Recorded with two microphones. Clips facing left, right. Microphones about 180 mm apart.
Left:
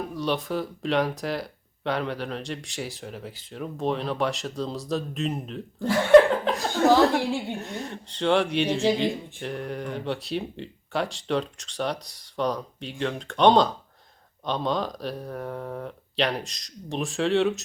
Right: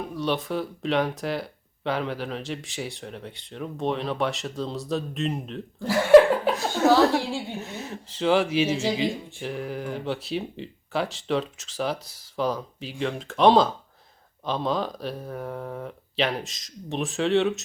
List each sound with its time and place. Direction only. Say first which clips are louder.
0.0 s speech: even; centre (ahead or behind)
7.2 s speech: left 3 dB; 15° left (ahead or behind)
7.5 s speech: left 1 dB; centre (ahead or behind)